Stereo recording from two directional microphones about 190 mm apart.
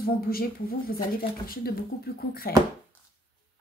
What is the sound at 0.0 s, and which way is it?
Speech, 50° left (ahead or behind).